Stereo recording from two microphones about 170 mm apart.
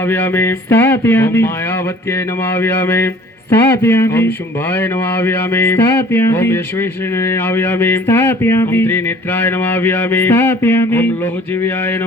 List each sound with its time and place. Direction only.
0.1 s music: 15° left (ahead or behind)
2.6 s music: 15° left (ahead or behind)